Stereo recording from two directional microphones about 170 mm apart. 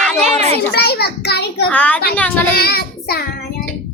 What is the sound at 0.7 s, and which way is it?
Speech, 70° left (ahead or behind).